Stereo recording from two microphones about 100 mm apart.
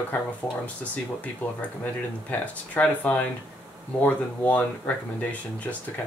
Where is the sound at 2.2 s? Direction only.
15° left (ahead or behind).